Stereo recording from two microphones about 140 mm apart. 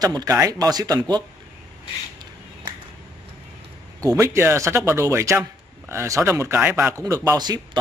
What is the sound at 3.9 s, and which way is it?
Speech, 25° right (ahead or behind).